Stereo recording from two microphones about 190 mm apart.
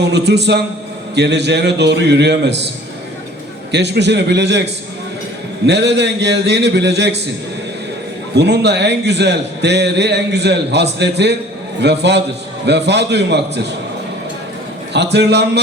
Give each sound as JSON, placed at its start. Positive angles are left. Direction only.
{"t": 0.1, "sound": "a man's voice", "side_deg": -65}
{"t": 3.7, "sound": "a man's voice", "side_deg": -65}
{"t": 8.4, "sound": "a man's voice", "side_deg": -60}
{"t": 14.9, "sound": "a man's voice", "side_deg": -60}